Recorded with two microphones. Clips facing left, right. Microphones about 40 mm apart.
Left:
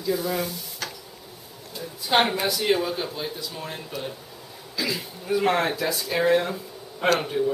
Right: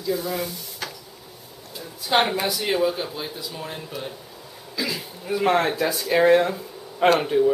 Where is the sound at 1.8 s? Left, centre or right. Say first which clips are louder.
Even; centre.